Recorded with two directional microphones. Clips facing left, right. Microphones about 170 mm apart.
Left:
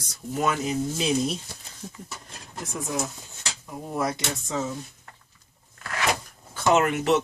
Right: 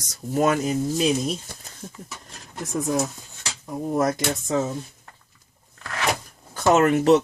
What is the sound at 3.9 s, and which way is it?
Speech, 45° right (ahead or behind).